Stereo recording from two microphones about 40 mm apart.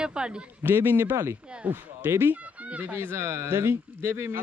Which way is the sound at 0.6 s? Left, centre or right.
Right.